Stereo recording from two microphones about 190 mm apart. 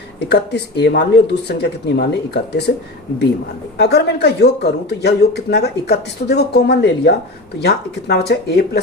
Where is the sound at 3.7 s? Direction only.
60° left (ahead or behind).